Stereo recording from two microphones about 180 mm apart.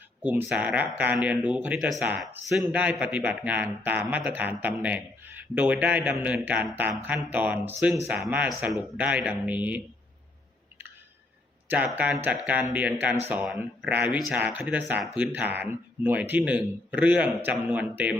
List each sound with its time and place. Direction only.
0.2 s a man's voice: 10° right (ahead or behind)
11.7 s a man's voice: 10° right (ahead or behind)